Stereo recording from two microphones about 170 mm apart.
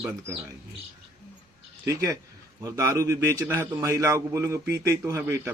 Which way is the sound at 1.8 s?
20° right (ahead or behind).